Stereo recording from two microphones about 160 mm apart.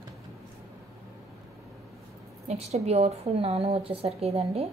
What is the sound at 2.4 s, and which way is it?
A woman's voice, 40° right (ahead or behind).